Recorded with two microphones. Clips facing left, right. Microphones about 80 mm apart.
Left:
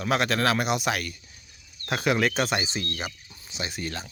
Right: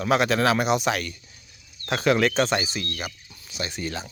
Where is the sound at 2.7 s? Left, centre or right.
Left.